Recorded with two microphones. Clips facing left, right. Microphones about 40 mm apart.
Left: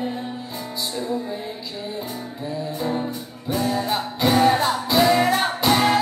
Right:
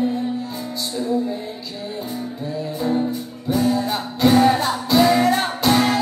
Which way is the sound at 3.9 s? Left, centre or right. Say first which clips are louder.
Right 3 dB; centre.